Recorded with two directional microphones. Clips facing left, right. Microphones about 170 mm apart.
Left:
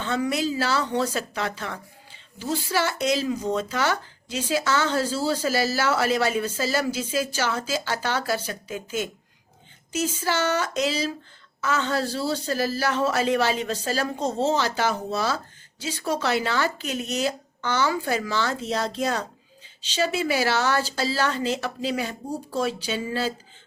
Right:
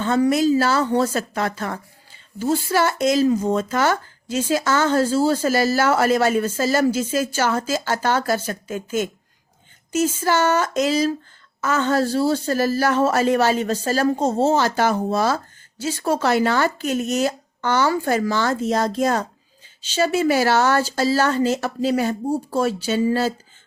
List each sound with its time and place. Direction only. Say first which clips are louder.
0.0 s a woman's voice: right 8 dB; 45° right (ahead or behind)